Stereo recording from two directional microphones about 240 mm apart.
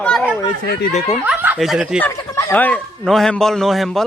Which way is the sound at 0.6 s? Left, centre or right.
Left.